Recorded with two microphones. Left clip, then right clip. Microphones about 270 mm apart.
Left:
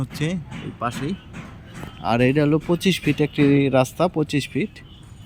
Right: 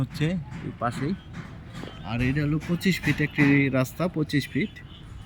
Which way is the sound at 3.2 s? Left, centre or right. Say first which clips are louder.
Left 4 dB; left.